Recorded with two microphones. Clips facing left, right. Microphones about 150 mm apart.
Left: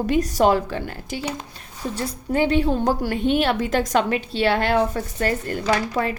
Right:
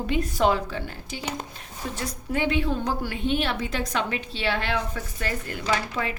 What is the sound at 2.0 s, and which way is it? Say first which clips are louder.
A woman's voice: left 6 dB; 35° left (ahead or behind).